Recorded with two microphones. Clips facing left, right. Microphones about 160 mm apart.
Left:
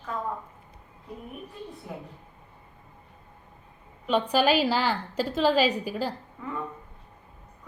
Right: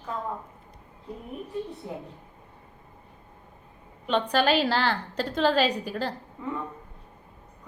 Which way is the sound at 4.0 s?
10° left (ahead or behind).